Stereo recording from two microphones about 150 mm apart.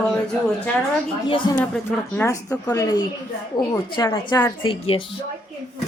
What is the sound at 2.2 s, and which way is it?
A woman's voice, 20° left (ahead or behind).